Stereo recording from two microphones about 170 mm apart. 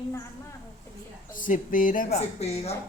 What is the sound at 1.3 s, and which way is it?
A man's voice, 50° left (ahead or behind).